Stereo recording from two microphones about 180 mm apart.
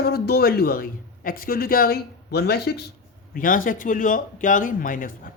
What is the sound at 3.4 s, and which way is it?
Speech, 50° left (ahead or behind).